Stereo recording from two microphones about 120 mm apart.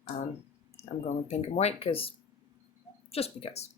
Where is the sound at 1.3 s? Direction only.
65° left (ahead or behind).